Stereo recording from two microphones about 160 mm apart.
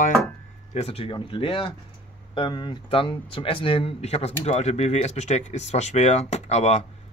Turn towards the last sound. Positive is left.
turn(degrees=45)  # may be behind; listen again after turning